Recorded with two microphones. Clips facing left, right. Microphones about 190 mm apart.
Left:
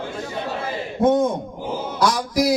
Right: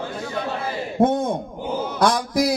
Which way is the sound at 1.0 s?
60° right (ahead or behind).